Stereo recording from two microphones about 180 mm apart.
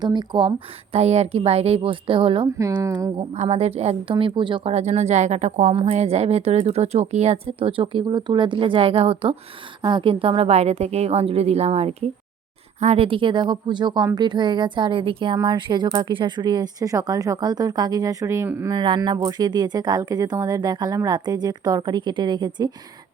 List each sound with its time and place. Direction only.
0.0 s a woman's voice: 25° right (ahead or behind)
0.9 s a woman's voice: 35° right (ahead or behind)
2.6 s speech: 15° right (ahead or behind)
3.3 s a woman's voice: 35° right (ahead or behind); by 18.7 s 15° right (ahead or behind)
18.7 s a woman's voice: 25° right (ahead or behind)